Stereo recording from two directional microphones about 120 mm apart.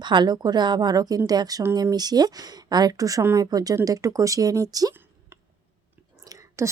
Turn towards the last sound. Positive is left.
turn(degrees=-30)  # may be behind; listen again after turning